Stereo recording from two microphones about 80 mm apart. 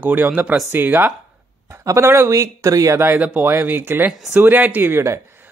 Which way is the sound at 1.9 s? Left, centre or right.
Right.